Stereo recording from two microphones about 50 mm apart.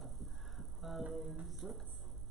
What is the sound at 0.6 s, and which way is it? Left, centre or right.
Music, centre.